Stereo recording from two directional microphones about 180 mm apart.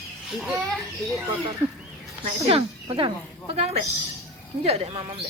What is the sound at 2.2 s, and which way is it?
Speech, 35° right (ahead or behind).